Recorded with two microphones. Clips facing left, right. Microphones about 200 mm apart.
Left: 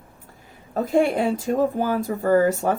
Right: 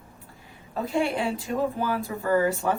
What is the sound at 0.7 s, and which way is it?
Speech, 45° left (ahead or behind).